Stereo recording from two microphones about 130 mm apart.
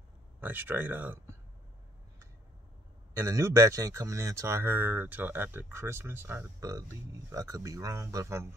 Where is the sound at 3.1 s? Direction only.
20° right (ahead or behind).